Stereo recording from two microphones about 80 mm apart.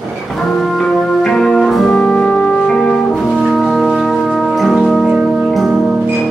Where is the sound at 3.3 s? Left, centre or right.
Centre.